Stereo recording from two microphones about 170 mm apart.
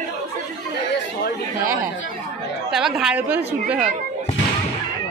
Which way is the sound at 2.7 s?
5° right (ahead or behind).